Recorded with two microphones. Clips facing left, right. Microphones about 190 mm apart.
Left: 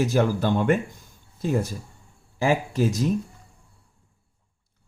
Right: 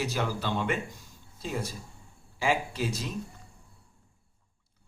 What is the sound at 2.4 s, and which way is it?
Speech, 45° left (ahead or behind).